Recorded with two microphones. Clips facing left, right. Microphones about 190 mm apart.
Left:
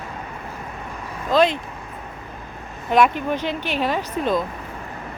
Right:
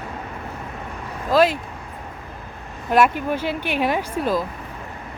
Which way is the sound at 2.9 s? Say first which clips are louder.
Even; 10° right (ahead or behind).